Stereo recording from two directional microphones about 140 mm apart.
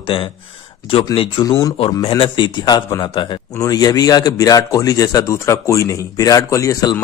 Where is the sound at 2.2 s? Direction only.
35° left (ahead or behind).